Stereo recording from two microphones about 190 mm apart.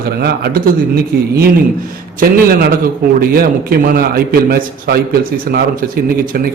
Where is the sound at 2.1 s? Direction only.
50° right (ahead or behind).